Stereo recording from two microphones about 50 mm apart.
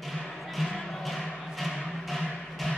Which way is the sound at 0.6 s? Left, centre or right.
Centre.